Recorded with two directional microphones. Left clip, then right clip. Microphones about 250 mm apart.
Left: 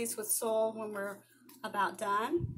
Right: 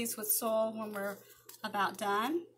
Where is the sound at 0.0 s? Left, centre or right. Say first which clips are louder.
Left 1 dB; centre.